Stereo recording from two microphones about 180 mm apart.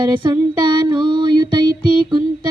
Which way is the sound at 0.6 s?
25° right (ahead or behind).